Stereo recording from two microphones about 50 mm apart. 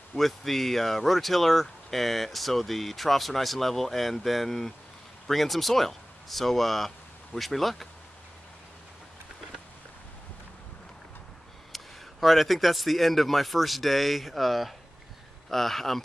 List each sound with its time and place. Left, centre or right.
0.1 s speech: centre
11.7 s speech: centre